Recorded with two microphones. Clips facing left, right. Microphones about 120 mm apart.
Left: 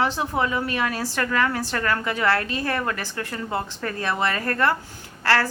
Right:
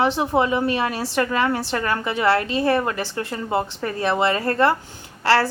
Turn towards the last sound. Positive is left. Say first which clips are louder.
# right 3 dB
turn(degrees=-25)  # may be behind; listen again after turning